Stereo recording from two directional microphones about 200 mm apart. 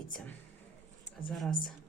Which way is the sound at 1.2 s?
Centre (ahead or behind).